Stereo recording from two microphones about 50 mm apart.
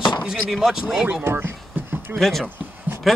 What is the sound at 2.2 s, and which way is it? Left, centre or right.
Chopping, centre.